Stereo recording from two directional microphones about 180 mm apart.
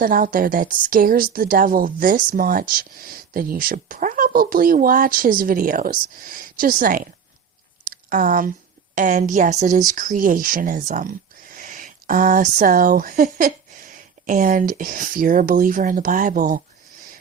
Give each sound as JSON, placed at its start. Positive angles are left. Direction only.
{"t": 0.0, "sound": "speech", "side_deg": -50}
{"t": 7.9, "sound": "a sound", "side_deg": -50}
{"t": 9.0, "sound": "a woman's voice", "side_deg": -45}